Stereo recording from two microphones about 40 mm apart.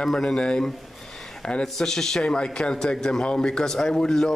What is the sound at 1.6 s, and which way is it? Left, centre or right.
A man's voice, centre.